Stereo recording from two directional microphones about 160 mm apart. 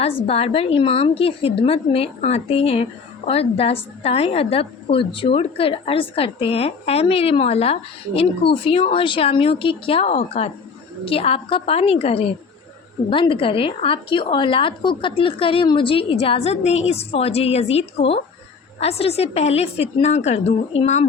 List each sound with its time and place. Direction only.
0.0 s a woman's voice: 40° left (ahead or behind)